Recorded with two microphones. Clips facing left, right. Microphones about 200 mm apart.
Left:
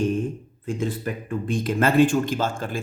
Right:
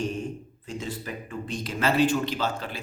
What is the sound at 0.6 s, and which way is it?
Speech, 55° left (ahead or behind).